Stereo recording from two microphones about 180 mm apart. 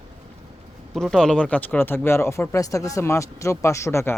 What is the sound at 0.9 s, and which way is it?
Speech, 5° left (ahead or behind).